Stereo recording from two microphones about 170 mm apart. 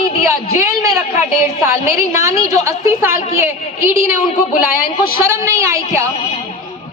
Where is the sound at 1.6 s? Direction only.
15° right (ahead or behind).